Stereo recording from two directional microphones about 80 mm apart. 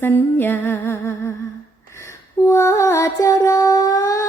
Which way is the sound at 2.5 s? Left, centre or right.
Left.